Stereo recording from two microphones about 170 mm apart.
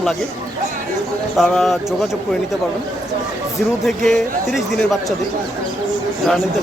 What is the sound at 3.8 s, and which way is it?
Speech, centre (ahead or behind).